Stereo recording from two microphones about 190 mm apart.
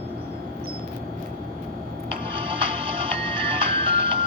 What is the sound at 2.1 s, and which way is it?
Music, 25° right (ahead or behind).